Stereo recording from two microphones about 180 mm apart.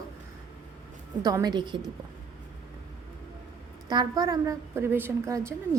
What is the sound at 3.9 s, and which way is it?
A woman's voice, 20° right (ahead or behind).